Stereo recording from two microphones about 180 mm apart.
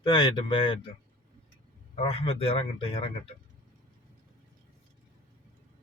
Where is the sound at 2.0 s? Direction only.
30° left (ahead or behind).